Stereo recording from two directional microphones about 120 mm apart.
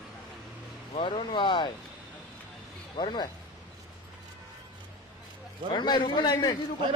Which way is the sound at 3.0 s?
35° left (ahead or behind).